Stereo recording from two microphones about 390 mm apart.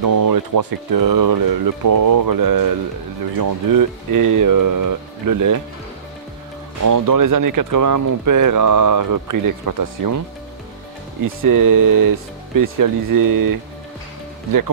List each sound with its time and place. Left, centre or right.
0.0 s speech: right
0.9 s a sound: right
3.3 s speech: right
6.8 s speech: right
11.4 s speech: right